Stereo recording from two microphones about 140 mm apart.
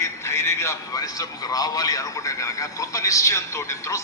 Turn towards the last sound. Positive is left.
turn(degrees=20)  # may be behind; listen again after turning